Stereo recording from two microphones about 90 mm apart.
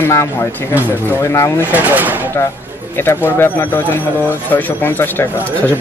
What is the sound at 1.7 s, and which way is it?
Speech, 20° right (ahead or behind).